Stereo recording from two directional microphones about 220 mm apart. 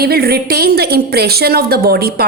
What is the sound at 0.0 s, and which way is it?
A woman's voice, 45° right (ahead or behind).